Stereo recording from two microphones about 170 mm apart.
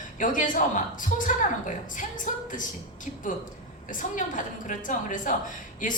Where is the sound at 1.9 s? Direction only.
50° left (ahead or behind).